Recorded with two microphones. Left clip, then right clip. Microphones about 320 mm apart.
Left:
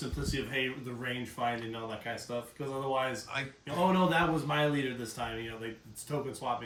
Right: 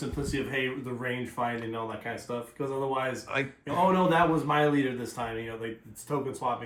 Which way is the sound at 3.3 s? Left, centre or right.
Centre.